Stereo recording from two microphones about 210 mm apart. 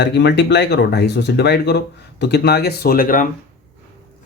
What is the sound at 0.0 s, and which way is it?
Speech, 55° left (ahead or behind).